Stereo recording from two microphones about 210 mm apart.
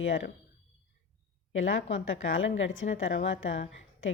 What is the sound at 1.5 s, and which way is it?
Speech, 65° left (ahead or behind).